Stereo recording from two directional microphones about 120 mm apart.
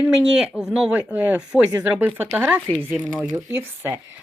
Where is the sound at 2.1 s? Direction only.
20° right (ahead or behind).